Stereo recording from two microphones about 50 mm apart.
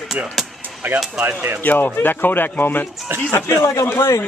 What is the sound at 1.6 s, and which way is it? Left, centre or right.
Speech, left.